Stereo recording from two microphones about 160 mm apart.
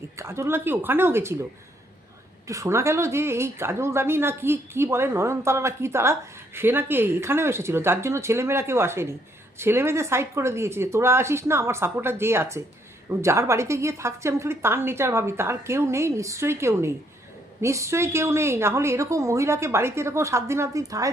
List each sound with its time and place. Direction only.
0.2 s a woman's voice: 15° right (ahead or behind)
2.5 s a woman's voice: 20° right (ahead or behind)